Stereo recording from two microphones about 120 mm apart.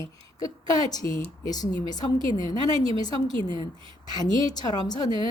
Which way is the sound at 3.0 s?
35° left (ahead or behind).